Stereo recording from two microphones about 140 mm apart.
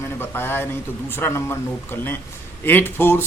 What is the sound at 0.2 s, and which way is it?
A man's voice, 15° left (ahead or behind).